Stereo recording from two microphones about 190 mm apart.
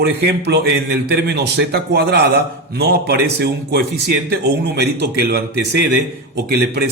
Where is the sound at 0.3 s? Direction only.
60° right (ahead or behind).